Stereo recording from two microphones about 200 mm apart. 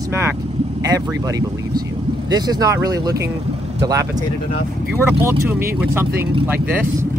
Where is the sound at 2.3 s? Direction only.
20° right (ahead or behind).